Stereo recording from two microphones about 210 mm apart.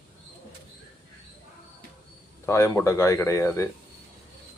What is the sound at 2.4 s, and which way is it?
Speech, 15° left (ahead or behind).